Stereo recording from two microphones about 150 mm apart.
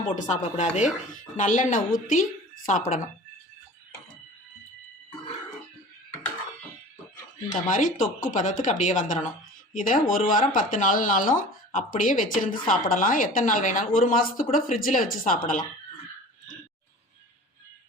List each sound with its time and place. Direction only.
0.2 s speech: 50° left (ahead or behind)
7.7 s speech: 60° left (ahead or behind)